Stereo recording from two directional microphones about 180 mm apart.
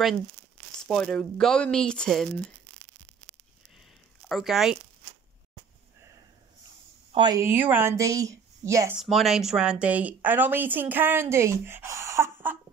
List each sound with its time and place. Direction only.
0.8 s speech: centre (ahead or behind)
4.3 s speech: centre (ahead or behind)
7.1 s speech: 25° right (ahead or behind)
7.4 s speech: 10° right (ahead or behind)
8.9 s speech: centre (ahead or behind)